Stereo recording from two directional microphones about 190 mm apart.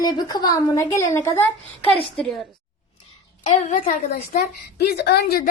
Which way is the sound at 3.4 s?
40° left (ahead or behind).